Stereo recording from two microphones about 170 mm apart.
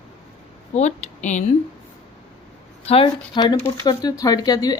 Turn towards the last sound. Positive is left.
turn(degrees=20)  # may be behind; listen again after turning